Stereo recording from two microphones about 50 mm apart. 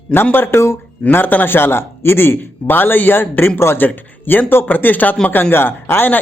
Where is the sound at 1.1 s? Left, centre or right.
Left.